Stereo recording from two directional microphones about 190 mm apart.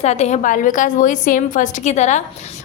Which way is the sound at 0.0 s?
35° left (ahead or behind).